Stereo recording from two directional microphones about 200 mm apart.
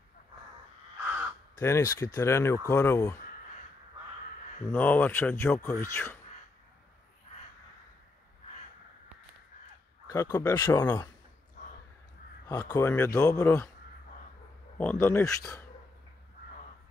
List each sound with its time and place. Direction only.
1.6 s speech: 15° left (ahead or behind)
4.7 s speech: 10° left (ahead or behind)
10.0 s speech: 15° left (ahead or behind)
11.6 s crow: 45° left (ahead or behind)
12.4 s speech: 15° left (ahead or behind)
14.8 s speech: 10° left (ahead or behind)